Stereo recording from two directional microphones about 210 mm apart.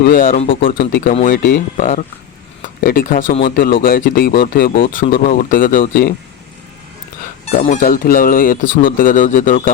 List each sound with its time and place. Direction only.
0.0 s speech: 45° left (ahead or behind)
7.4 s speech: 35° left (ahead or behind)